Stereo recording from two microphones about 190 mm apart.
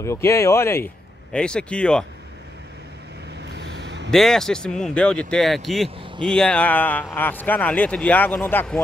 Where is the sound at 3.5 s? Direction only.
65° right (ahead or behind).